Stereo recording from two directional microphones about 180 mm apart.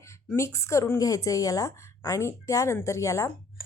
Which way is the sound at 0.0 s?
15° left (ahead or behind).